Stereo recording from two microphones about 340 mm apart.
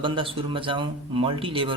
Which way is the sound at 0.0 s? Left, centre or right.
Centre.